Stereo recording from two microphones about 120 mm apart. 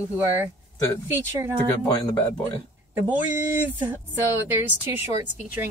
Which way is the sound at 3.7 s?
15° right (ahead or behind).